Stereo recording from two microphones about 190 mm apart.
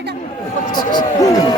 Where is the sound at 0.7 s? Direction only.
20° left (ahead or behind).